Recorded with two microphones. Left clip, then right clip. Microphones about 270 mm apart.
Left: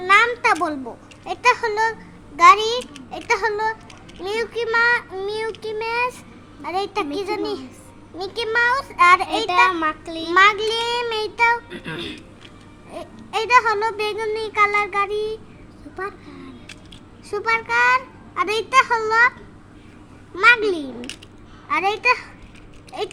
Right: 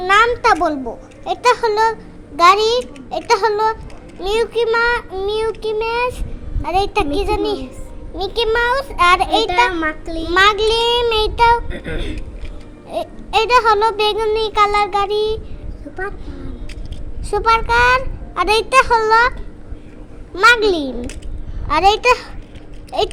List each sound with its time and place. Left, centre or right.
0.0 s a child's voice: centre
11.7 s speech: centre
12.9 s a child's voice: centre
17.3 s a child's voice: centre
20.3 s a child's voice: centre